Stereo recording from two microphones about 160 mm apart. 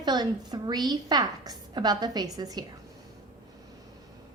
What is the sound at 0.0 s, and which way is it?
A woman's voice, 25° right (ahead or behind).